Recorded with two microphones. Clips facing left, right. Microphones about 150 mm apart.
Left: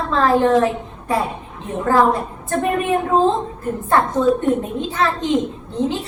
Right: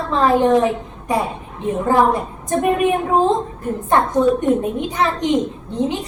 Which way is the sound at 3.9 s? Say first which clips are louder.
Right 1 dB; 15° right (ahead or behind).